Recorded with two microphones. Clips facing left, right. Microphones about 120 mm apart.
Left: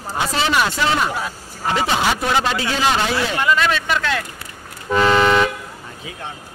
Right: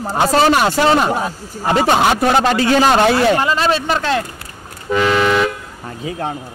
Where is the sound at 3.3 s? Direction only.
35° right (ahead or behind).